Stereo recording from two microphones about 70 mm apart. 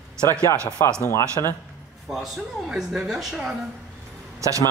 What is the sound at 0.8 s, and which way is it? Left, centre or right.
Speech, left.